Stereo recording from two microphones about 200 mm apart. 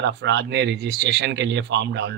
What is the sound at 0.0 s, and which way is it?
Speech, 60° right (ahead or behind).